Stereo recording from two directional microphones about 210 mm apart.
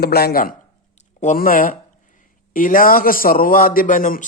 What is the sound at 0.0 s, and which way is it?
Speech, 50° left (ahead or behind).